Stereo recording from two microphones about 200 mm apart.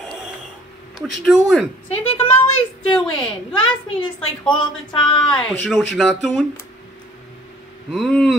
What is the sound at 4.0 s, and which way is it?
A woman's voice, 25° left (ahead or behind).